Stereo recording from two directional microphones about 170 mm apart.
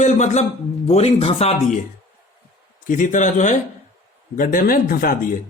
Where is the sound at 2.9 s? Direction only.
50° left (ahead or behind).